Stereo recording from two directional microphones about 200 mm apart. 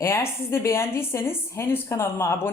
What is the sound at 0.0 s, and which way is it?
A woman's voice, 10° left (ahead or behind).